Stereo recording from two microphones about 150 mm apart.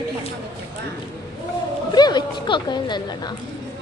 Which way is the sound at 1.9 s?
30° left (ahead or behind).